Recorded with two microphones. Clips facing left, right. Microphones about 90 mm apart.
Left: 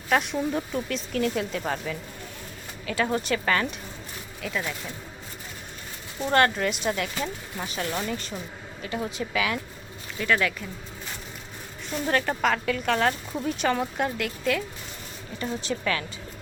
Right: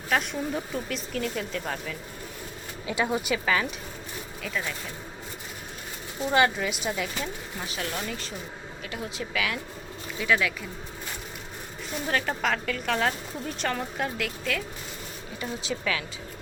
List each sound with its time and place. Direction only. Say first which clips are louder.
0.1 s speech: left 3 dB; centre (ahead or behind)
2.8 s speech: left 1 dB; 15° right (ahead or behind); by 4.7 s 5° left (ahead or behind)
6.3 s speech: left 2 dB; 5° right (ahead or behind)
12.0 s speech: left 3 dB; centre (ahead or behind)